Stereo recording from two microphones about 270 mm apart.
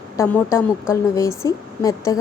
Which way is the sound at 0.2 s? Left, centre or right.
Centre.